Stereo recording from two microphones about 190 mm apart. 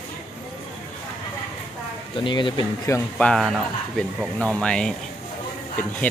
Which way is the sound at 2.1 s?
25° left (ahead or behind).